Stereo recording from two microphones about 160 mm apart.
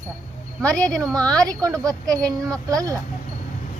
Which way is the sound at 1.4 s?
25° right (ahead or behind).